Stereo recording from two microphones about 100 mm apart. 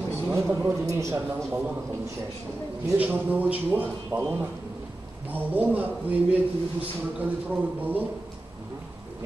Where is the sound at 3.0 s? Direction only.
15° right (ahead or behind).